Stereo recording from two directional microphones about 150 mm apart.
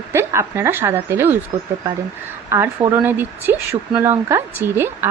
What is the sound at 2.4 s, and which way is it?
Speech, 20° right (ahead or behind).